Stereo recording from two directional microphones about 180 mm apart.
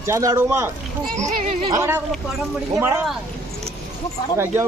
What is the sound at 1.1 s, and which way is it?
Speech, 40° right (ahead or behind).